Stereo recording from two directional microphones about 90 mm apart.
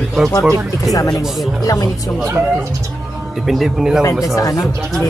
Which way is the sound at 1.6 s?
45° left (ahead or behind).